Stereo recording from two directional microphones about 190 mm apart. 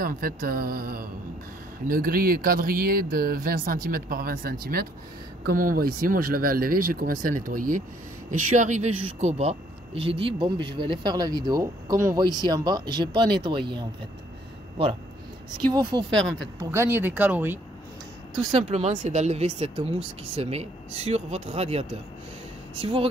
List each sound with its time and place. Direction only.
0.0 s speech: 50° right (ahead or behind); by 13.8 s 25° right (ahead or behind)
15.7 s speech: 20° right (ahead or behind)
16.1 s speech: 5° left (ahead or behind)
16.5 s speech: 15° right (ahead or behind)
18.5 s speech: 35° right (ahead or behind)